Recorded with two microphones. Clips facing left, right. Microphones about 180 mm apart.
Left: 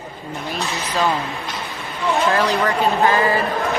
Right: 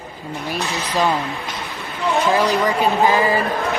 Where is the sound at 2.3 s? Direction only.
15° right (ahead or behind).